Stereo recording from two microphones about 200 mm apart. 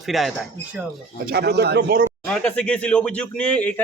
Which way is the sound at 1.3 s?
55° right (ahead or behind).